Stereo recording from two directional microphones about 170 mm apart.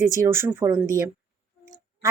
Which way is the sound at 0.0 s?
15° right (ahead or behind).